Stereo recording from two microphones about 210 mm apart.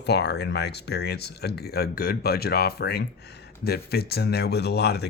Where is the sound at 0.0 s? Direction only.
55° left (ahead or behind).